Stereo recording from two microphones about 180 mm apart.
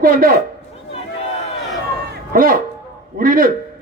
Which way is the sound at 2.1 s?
50° right (ahead or behind).